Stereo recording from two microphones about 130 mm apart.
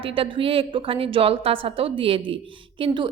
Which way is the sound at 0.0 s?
45° right (ahead or behind).